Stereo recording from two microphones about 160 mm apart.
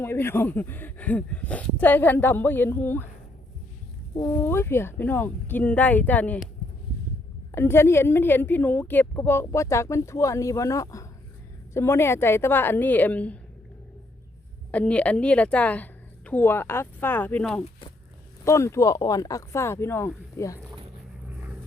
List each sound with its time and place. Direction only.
0.0 s a woman's voice: 15° left (ahead or behind)
4.3 s a woman's voice: 15° left (ahead or behind)
7.5 s a woman's voice: 15° left (ahead or behind)
14.7 s a woman's voice: 10° left (ahead or behind)
18.4 s speech: 15° left (ahead or behind)